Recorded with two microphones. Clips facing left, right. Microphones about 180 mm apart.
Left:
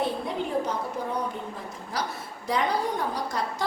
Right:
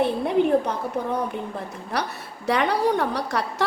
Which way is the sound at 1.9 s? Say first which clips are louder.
Right 4 dB; 65° right (ahead or behind).